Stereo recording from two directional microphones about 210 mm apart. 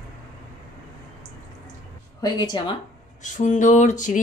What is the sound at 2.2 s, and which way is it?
Speech, 20° left (ahead or behind).